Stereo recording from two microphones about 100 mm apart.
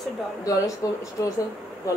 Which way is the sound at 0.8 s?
35° left (ahead or behind).